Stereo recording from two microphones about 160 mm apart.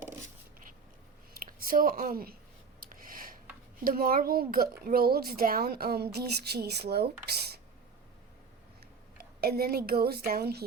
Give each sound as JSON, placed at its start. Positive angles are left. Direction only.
{"t": 1.3, "sound": "speech", "side_deg": -60}
{"t": 2.8, "sound": "a sound", "side_deg": -60}
{"t": 3.8, "sound": "speech", "side_deg": -65}
{"t": 9.1, "sound": "speech", "side_deg": -75}